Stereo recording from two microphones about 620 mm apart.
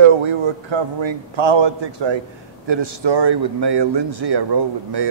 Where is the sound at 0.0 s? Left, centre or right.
Right.